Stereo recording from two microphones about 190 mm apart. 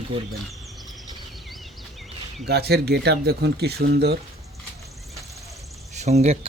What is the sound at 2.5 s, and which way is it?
Speech, 60° right (ahead or behind).